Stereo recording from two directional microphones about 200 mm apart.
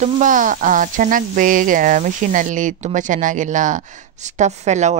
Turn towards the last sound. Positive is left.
turn(degrees=-35)  # may be behind; listen again after turning